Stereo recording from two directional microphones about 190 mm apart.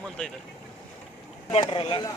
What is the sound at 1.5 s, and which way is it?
Speech, 25° left (ahead or behind).